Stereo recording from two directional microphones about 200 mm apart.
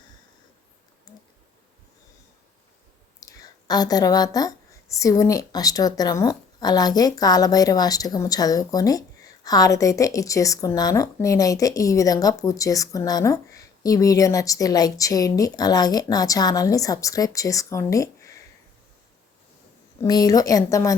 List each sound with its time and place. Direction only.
1.1 s computer keyboard: 20° left (ahead or behind)
3.2 s speech: 15° left (ahead or behind)
20.0 s speech: 20° left (ahead or behind)